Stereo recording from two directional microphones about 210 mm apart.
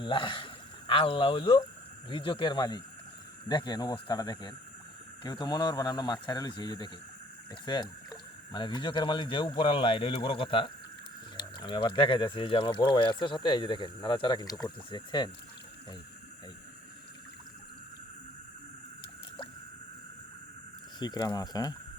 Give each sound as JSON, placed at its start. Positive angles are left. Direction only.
{"t": 0.0, "sound": "speech", "side_deg": 25}
{"t": 21.0, "sound": "speech", "side_deg": 20}